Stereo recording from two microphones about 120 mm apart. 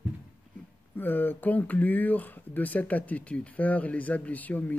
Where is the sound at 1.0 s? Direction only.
15° left (ahead or behind).